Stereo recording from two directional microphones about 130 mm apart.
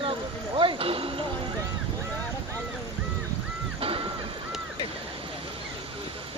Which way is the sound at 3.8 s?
45° right (ahead or behind).